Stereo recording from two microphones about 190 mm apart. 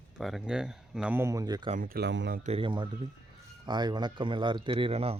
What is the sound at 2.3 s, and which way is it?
Speech, 35° right (ahead or behind).